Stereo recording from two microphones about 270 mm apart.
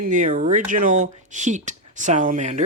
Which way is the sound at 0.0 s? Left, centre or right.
Right.